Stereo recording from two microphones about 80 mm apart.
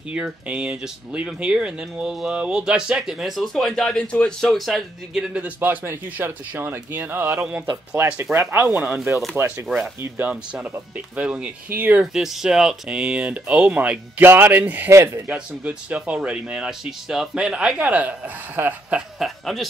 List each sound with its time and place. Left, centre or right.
0.1 s speech: centre
5.3 s speech: centre
8.7 s speech: centre
9.4 s speech: right
10.3 s speech: centre
12.1 s speech: centre
19.1 s speech: centre